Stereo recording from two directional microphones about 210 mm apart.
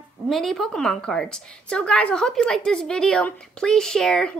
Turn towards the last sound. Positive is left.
turn(degrees=5)  # may be behind; listen again after turning